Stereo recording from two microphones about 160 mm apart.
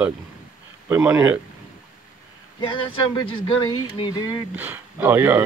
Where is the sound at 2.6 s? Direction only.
30° left (ahead or behind).